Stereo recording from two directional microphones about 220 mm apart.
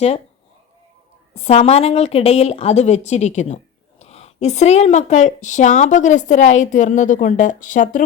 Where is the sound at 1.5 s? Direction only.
30° left (ahead or behind).